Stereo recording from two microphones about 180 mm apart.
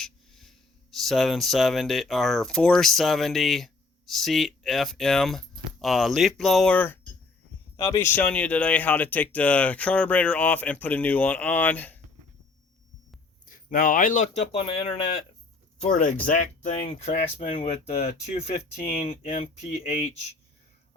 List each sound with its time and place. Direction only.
0.0 s speech: centre (ahead or behind)
13.4 s speech: 50° left (ahead or behind)